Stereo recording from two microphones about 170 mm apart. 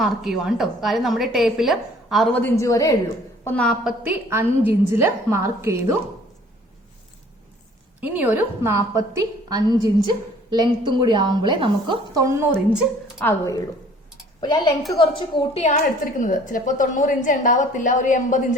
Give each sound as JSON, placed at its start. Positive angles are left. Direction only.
{"t": 0.0, "sound": "a woman's voice", "side_deg": 0}
{"t": 2.3, "sound": "a woman's voice", "side_deg": 15}
{"t": 3.4, "sound": "a woman's voice", "side_deg": 5}
{"t": 4.0, "sound": "a woman's voice", "side_deg": -10}
{"t": 8.0, "sound": "a woman's voice", "side_deg": -10}
{"t": 13.1, "sound": "a woman's voice", "side_deg": 15}
{"t": 15.6, "sound": "a woman's voice", "side_deg": 45}